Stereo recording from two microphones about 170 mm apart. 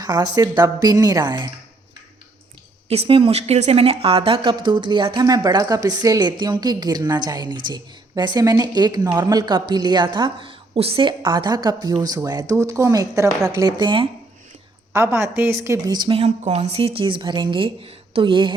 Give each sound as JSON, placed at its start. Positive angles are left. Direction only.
{"t": 0.0, "sound": "a woman's voice", "side_deg": -20}
{"t": 2.9, "sound": "a woman's voice", "side_deg": -35}
{"t": 14.9, "sound": "a woman's voice", "side_deg": -15}